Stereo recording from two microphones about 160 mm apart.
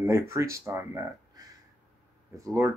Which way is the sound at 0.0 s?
15° right (ahead or behind).